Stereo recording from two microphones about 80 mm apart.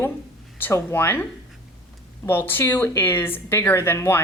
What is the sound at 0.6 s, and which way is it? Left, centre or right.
A woman's voice, left.